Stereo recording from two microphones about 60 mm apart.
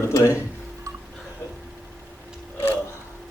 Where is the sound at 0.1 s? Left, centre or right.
Left.